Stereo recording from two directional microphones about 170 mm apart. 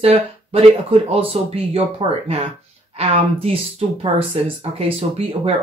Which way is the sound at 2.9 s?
35° right (ahead or behind).